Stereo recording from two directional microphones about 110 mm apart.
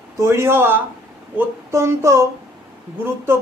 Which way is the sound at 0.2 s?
25° right (ahead or behind).